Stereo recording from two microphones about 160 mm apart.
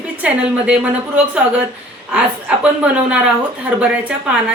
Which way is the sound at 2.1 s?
5° right (ahead or behind).